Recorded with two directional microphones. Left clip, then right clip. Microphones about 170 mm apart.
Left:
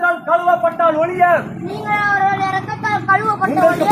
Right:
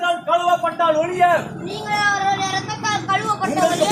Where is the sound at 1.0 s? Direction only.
25° right (ahead or behind).